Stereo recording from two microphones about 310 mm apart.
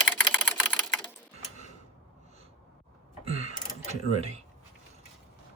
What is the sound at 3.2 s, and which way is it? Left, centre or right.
Mechanisms, centre.